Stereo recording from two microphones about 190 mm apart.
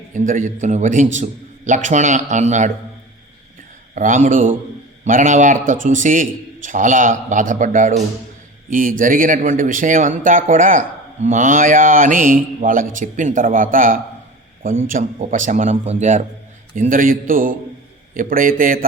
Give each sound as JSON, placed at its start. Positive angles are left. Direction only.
{"t": 0.1, "sound": "a man's voice", "side_deg": -40}
{"t": 3.9, "sound": "a man's voice", "side_deg": -40}